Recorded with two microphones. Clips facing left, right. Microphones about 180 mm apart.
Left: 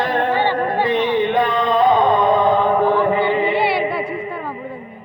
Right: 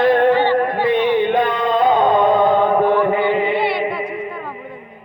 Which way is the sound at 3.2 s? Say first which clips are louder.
Even; 40° left (ahead or behind).